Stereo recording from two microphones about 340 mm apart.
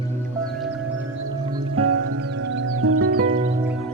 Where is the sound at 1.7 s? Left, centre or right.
Right.